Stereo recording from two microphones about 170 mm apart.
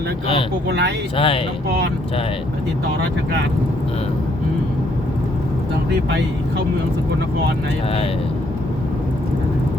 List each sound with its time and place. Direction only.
0.7 s speech: 80° right
1.1 s speech: 30° left (ahead or behind)